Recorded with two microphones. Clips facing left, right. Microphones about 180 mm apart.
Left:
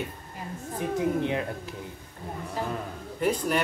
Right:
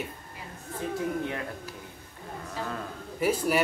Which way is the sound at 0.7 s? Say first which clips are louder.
Left 4 dB; 20° left (ahead or behind).